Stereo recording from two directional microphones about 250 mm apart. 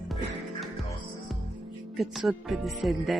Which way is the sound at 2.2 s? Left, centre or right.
Centre.